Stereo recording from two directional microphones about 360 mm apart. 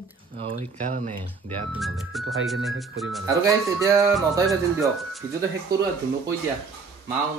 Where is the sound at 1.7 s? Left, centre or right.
Centre.